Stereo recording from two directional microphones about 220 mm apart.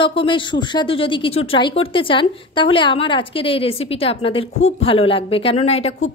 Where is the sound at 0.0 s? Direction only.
25° left (ahead or behind).